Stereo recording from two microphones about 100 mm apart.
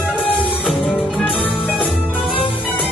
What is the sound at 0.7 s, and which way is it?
Music, centre (ahead or behind).